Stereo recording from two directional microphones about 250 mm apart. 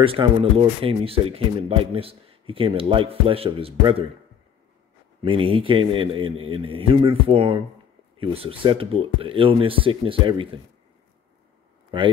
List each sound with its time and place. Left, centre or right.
0.0 s speech: right
5.2 s speech: right
11.9 s speech: centre